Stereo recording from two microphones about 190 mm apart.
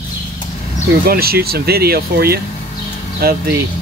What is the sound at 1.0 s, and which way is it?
Speech, 55° right (ahead or behind).